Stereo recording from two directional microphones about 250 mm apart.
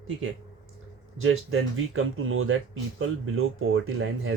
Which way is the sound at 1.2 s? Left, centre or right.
Right.